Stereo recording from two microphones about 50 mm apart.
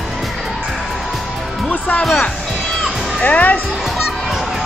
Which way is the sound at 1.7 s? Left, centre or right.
Left.